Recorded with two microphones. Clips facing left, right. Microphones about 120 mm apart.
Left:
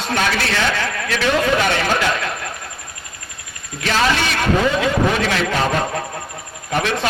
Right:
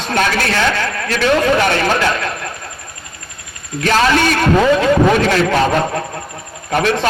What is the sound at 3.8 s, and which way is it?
Speech, 50° right (ahead or behind).